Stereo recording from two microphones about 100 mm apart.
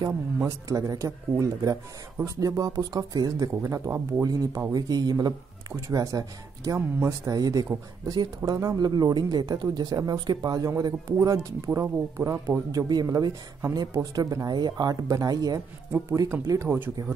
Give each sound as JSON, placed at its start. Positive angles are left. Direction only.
{"t": 0.5, "sound": "speech", "side_deg": -35}